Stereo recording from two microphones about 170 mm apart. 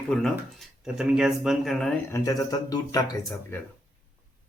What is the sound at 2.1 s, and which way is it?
Speech, 20° left (ahead or behind).